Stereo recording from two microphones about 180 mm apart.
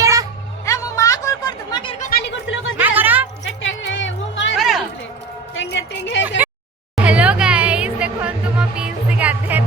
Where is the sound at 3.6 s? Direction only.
90° left.